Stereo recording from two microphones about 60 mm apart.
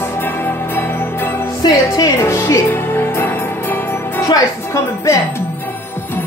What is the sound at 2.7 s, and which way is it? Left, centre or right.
Music, left.